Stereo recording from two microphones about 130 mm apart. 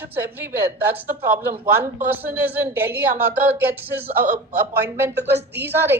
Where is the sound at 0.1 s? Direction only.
15° right (ahead or behind).